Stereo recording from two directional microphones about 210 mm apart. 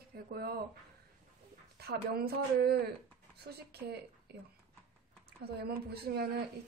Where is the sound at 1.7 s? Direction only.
50° right (ahead or behind).